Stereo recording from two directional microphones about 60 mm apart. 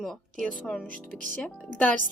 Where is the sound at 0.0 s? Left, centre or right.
Centre.